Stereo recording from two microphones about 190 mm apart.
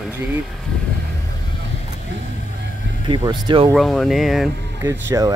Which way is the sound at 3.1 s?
25° right (ahead or behind).